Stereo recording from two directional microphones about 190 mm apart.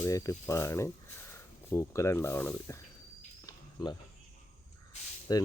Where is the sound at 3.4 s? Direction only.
20° left (ahead or behind).